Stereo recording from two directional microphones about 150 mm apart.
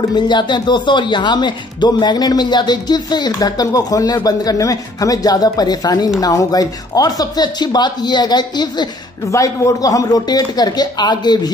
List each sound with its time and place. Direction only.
0.1 s speech: 30° left (ahead or behind)